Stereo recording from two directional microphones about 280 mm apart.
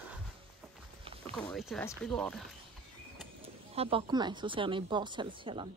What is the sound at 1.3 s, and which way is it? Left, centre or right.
Speech, centre.